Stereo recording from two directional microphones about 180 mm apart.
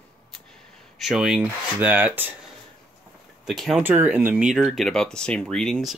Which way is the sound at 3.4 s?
Centre (ahead or behind).